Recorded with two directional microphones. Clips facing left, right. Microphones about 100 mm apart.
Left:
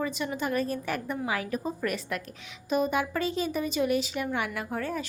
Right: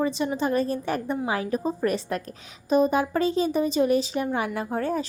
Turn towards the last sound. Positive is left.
turn(degrees=-35)  # may be behind; listen again after turning